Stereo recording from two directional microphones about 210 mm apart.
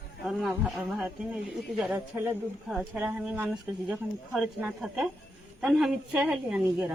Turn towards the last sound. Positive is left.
turn(degrees=-5)  # may be behind; listen again after turning